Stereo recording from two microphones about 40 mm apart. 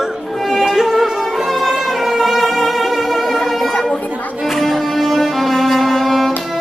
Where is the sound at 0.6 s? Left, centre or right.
Centre.